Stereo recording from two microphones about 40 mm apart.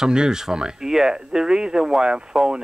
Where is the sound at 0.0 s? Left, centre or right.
Centre.